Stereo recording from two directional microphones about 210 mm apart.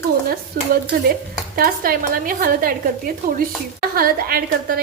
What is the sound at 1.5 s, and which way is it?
A woman's voice, 45° right (ahead or behind).